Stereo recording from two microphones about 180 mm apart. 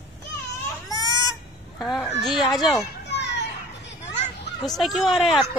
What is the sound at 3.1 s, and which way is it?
Children playing, 70° left (ahead or behind).